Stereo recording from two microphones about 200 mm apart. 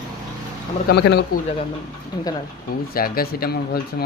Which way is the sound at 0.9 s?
55° left (ahead or behind).